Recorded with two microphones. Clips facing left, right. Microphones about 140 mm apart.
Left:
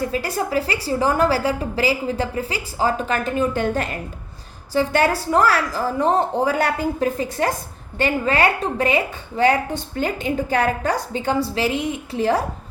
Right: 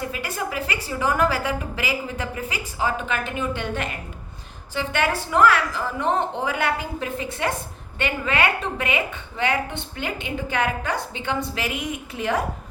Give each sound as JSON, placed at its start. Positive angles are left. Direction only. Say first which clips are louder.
{"t": 0.1, "sound": "a woman's voice", "louder": "left 7 dB", "side_deg": 35}